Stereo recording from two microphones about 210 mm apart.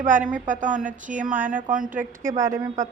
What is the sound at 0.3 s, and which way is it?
A woman's voice, 40° right (ahead or behind).